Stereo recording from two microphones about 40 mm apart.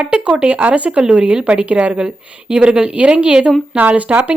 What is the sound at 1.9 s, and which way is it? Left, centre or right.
A woman's voice, right.